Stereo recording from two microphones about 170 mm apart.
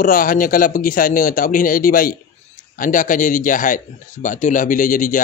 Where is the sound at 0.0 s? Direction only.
55° left (ahead or behind).